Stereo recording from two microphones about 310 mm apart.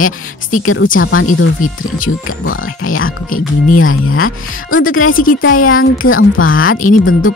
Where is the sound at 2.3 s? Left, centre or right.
Left.